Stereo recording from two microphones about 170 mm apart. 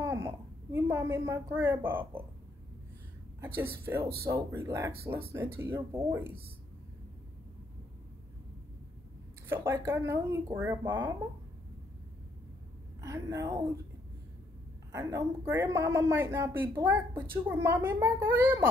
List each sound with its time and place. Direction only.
0.0 s a sound: 15° right (ahead or behind)
0.7 s speech: 15° right (ahead or behind)
3.3 s speech: 15° right (ahead or behind)
9.5 s speech: 15° right (ahead or behind)
13.0 s a woman's voice: 20° right (ahead or behind)
14.9 s speech: 20° right (ahead or behind)